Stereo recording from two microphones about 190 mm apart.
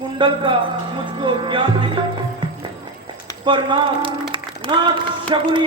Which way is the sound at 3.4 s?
25° right (ahead or behind).